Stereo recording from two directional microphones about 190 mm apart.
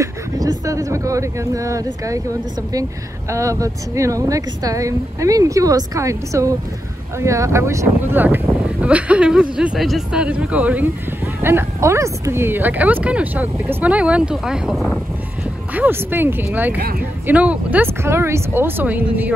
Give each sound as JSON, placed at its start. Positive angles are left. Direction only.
{"t": 0.0, "sound": "speech", "side_deg": -20}